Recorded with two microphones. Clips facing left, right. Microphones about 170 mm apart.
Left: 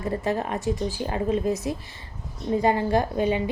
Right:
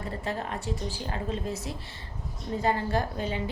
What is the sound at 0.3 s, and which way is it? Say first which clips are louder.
A woman's voice: left 6 dB; 20° left (ahead or behind).